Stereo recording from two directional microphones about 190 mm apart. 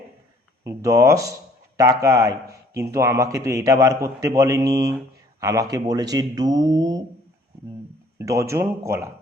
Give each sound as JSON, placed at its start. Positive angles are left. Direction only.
{"t": 0.6, "sound": "a man's voice", "side_deg": -15}
{"t": 8.2, "sound": "a man's voice", "side_deg": -15}